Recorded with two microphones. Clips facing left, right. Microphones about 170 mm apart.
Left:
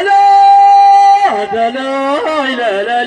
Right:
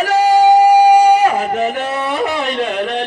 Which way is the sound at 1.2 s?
35° left (ahead or behind).